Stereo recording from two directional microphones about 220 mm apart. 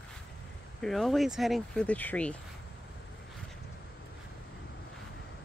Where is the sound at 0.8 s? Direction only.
Centre (ahead or behind).